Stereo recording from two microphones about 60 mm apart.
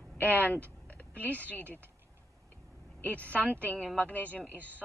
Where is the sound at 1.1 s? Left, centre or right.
Right.